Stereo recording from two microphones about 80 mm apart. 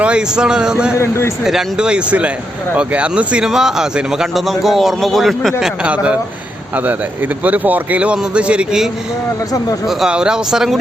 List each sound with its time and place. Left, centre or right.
0.0 s a man's voice: centre
0.9 s speech: left
1.5 s a man's voice: centre
7.4 s a man's voice: right; by 10.8 s centre